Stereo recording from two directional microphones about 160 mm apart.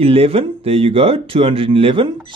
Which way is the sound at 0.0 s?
35° right (ahead or behind).